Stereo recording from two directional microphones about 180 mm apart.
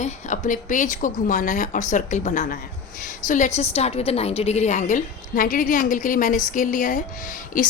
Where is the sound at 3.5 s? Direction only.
35° left (ahead or behind).